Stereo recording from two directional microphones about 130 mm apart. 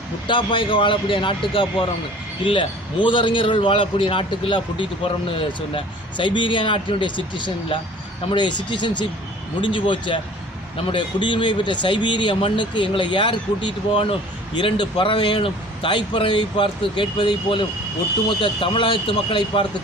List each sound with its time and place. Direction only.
0.3 s speech: 40° left (ahead or behind)